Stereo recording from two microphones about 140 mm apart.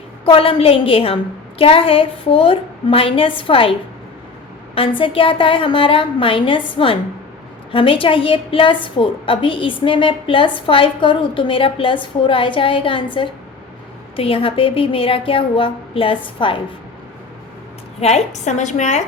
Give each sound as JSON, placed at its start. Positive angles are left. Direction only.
{"t": 0.3, "sound": "a woman's voice", "side_deg": 40}
{"t": 14.2, "sound": "a woman's voice", "side_deg": 40}
{"t": 18.0, "sound": "a woman's voice", "side_deg": 50}